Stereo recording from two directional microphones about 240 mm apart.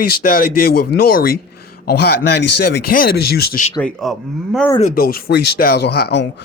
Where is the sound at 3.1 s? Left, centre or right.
Left.